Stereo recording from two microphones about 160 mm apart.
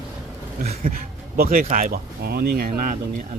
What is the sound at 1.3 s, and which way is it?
Speech, 60° right (ahead or behind).